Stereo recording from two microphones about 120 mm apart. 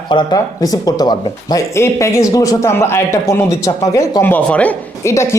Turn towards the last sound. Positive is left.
turn(degrees=25)  # may be behind; listen again after turning